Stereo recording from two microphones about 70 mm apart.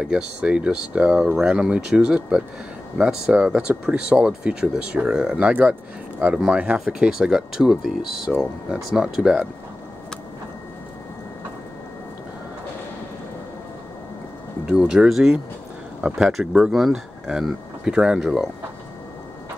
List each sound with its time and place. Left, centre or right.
0.0 s speech: centre
5.5 s speech: right
6.2 s speech: centre
14.7 s speech: centre